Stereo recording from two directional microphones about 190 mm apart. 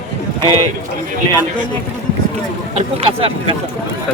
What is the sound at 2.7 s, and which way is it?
Speech, 30° right (ahead or behind).